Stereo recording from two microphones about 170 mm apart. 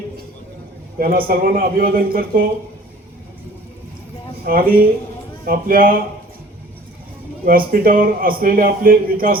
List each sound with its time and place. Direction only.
0.9 s a man's voice: 60° right (ahead or behind)
4.4 s a man's voice: 60° right (ahead or behind)
7.4 s a man's voice: 60° right (ahead or behind)